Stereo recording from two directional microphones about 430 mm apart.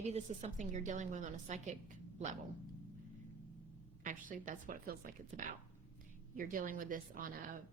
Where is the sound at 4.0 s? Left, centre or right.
Centre.